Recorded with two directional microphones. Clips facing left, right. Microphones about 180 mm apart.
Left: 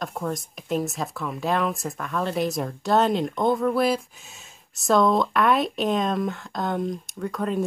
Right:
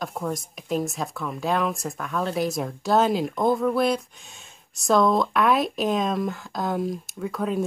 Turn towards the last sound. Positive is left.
turn(degrees=0)  # may be behind; listen again after turning